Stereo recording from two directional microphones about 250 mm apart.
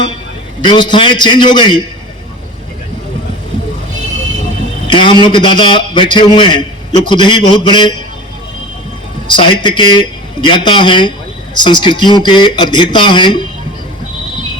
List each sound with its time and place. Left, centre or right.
0.6 s a man's voice: centre
4.9 s a man's voice: centre
9.3 s a man's voice: centre